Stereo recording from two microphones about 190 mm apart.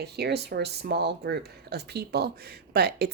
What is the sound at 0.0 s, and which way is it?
Speech, 60° right (ahead or behind).